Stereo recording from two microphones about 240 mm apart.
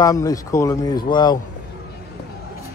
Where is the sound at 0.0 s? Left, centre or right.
Centre.